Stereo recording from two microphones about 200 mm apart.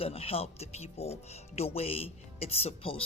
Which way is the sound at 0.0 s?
30° left (ahead or behind).